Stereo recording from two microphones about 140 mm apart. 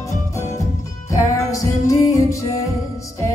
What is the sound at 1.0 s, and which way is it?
Music, 20° left (ahead or behind).